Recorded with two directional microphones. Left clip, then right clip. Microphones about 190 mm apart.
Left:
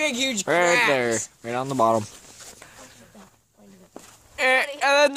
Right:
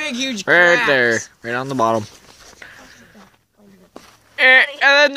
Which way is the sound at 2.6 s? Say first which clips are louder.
Right 6 dB; centre (ahead or behind).